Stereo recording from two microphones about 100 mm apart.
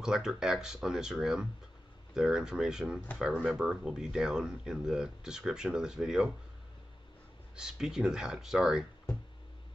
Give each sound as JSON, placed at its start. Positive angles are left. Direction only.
{"t": 0.0, "sound": "speech", "side_deg": -5}
{"t": 7.5, "sound": "speech", "side_deg": -5}